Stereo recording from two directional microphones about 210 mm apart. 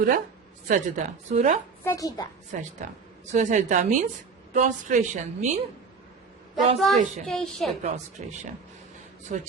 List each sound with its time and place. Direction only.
0.7 s a woman's voice: 35° right (ahead or behind)
1.8 s a woman's voice: 15° left (ahead or behind)
2.5 s a woman's voice: 35° right (ahead or behind)
6.7 s a woman's voice: centre (ahead or behind)
7.8 s a woman's voice: 35° right (ahead or behind)